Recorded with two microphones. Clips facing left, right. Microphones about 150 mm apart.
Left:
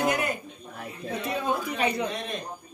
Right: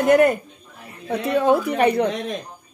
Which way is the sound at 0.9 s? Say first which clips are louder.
Right 9 dB; 70° right (ahead or behind).